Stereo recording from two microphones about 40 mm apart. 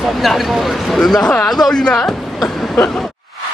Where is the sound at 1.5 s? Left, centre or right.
Centre.